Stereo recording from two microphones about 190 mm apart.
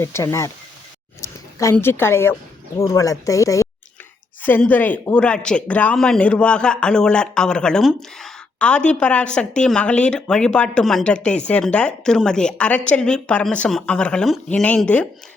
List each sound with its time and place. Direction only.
0.0 s a woman's voice: 15° left (ahead or behind)